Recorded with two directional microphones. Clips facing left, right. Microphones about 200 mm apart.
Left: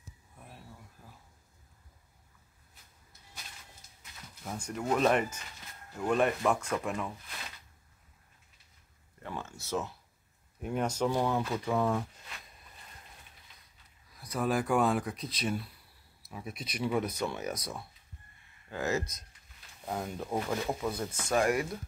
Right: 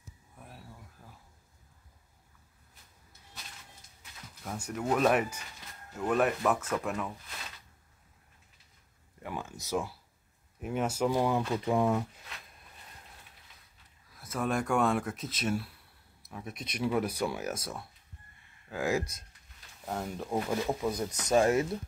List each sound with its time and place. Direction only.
4.6 s speech: 5° right (ahead or behind)
9.2 s a sound: 15° right (ahead or behind)
10.6 s speech: centre (ahead or behind)
14.1 s speech: centre (ahead or behind)
19.8 s speech: centre (ahead or behind)
20.4 s speech: 10° right (ahead or behind)